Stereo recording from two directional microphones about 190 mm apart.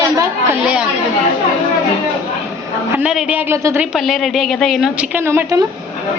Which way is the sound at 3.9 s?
Centre (ahead or behind).